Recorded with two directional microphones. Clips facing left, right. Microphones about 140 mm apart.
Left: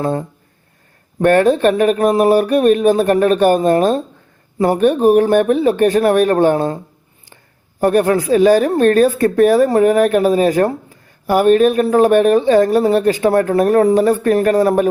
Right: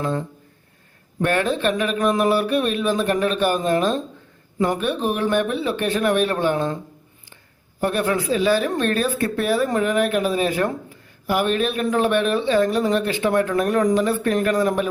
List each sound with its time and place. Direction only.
0.0 s speech: 45° left (ahead or behind)
7.8 s speech: 45° left (ahead or behind)